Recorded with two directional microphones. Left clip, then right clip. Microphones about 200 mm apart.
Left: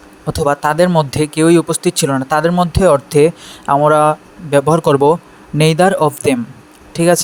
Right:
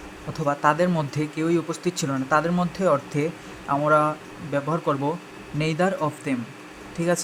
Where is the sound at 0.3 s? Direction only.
40° left (ahead or behind).